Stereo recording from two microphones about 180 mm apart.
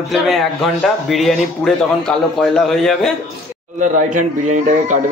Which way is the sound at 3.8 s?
45° right (ahead or behind).